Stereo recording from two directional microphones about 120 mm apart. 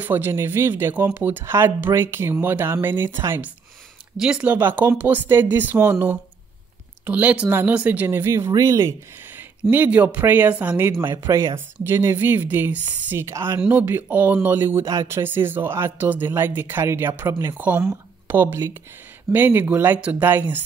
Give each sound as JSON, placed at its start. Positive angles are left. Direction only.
{"t": 0.0, "sound": "speech", "side_deg": -20}
{"t": 9.7, "sound": "speech", "side_deg": -15}